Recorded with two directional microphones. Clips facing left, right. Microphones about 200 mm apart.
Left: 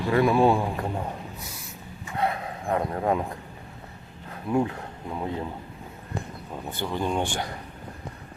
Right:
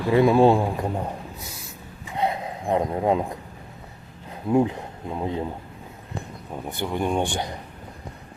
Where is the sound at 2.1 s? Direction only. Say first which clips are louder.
Right 2 dB; 20° right (ahead or behind).